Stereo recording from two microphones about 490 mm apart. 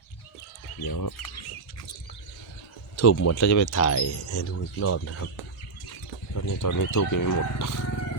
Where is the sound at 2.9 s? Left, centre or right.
Left.